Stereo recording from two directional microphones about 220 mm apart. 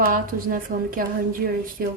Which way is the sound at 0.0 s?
40° right (ahead or behind).